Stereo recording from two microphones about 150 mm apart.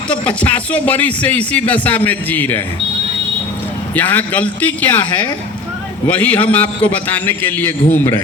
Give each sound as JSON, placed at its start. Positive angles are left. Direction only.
{"t": 0.1, "sound": "speech", "side_deg": 10}
{"t": 3.9, "sound": "speech", "side_deg": 10}
{"t": 6.1, "sound": "speech", "side_deg": 10}